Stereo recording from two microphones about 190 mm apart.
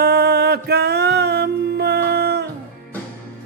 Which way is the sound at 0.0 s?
55° right (ahead or behind).